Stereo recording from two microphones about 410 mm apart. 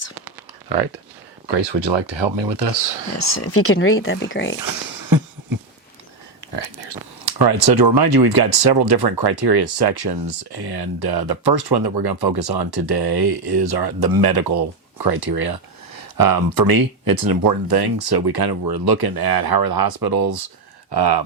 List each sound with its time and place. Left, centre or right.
1.5 s speech: right
3.2 s speech: left
4.6 s a sound: right
6.4 s a sound: right
7.3 s speech: right
20.9 s speech: right